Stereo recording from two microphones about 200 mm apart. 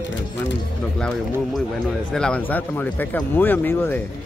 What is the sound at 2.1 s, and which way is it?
Speech, 5° left (ahead or behind).